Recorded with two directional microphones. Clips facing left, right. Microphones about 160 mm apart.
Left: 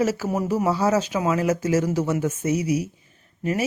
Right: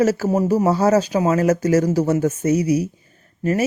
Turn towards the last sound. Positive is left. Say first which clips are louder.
# right 5 dB
turn(degrees=-45)  # may be behind; listen again after turning